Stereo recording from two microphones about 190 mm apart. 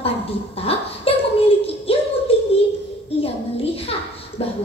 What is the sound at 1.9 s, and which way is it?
Music, 30° left (ahead or behind).